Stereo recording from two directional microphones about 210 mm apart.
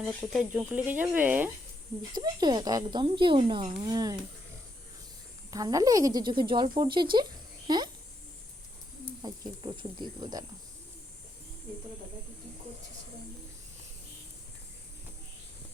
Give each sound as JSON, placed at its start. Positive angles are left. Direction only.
{"t": 0.0, "sound": "speech", "side_deg": -10}
{"t": 2.1, "sound": "speech", "side_deg": -20}
{"t": 5.5, "sound": "speech", "side_deg": -15}
{"t": 9.2, "sound": "speech", "side_deg": -20}